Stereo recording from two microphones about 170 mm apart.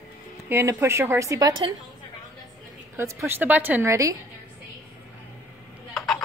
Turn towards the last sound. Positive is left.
turn(degrees=0)  # may be behind; listen again after turning